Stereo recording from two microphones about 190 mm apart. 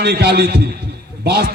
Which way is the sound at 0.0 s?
55° right (ahead or behind).